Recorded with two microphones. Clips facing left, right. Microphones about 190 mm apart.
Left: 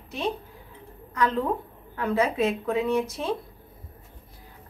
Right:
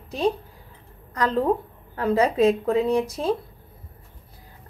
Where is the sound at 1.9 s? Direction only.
35° right (ahead or behind).